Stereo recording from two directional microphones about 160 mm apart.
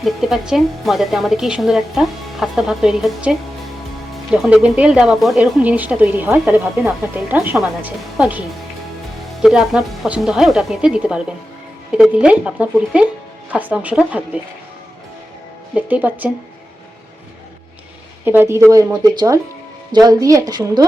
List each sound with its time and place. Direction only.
0.0 s a woman's voice: centre (ahead or behind)
9.4 s a woman's voice: 5° right (ahead or behind)
15.7 s a woman's voice: 10° right (ahead or behind)
18.3 s a woman's voice: 15° right (ahead or behind)